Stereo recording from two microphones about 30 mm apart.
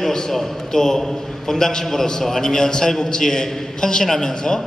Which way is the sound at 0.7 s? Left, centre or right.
Centre.